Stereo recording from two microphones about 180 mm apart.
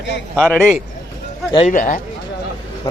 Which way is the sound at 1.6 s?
50° left (ahead or behind).